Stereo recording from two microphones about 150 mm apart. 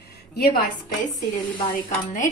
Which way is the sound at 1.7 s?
65° left (ahead or behind).